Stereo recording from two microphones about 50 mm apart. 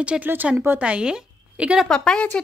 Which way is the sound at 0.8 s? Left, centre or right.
Right.